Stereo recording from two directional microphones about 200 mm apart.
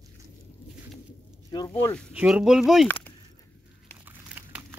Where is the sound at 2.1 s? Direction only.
5° right (ahead or behind).